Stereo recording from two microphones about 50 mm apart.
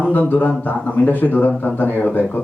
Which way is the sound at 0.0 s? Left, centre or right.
Left.